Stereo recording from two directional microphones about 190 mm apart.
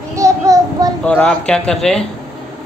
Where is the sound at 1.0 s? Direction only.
5° left (ahead or behind).